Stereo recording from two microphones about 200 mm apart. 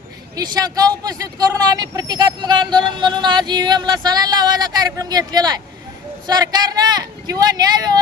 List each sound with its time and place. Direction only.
0.3 s speech: 20° right (ahead or behind)